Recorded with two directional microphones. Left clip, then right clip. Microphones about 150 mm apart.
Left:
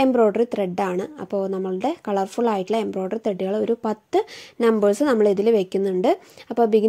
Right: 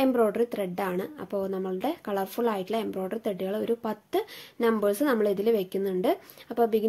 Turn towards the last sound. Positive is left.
turn(degrees=35)  # may be behind; listen again after turning